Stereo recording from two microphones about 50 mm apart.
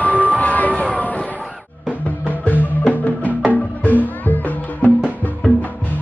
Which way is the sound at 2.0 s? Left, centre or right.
Left.